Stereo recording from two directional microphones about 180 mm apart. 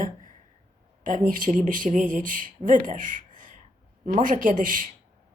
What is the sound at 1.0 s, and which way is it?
Speech, 50° right (ahead or behind).